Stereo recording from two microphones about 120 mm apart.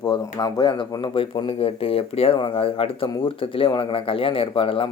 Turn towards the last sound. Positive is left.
turn(degrees=50)  # may be behind; listen again after turning